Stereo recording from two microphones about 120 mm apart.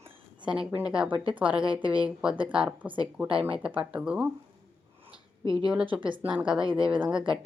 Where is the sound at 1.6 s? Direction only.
45° right (ahead or behind).